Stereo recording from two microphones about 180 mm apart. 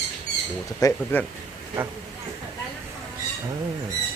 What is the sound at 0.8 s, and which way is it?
Speech, 10° left (ahead or behind).